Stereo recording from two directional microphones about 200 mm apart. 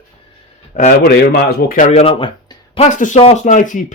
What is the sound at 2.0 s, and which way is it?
Speech, 25° left (ahead or behind).